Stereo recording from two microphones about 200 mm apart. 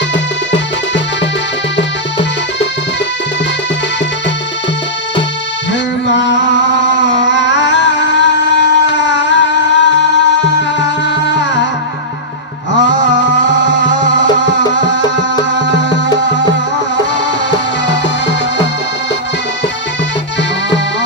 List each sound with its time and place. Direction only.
6.1 s music: 60° left (ahead or behind)
12.8 s music: 65° left (ahead or behind)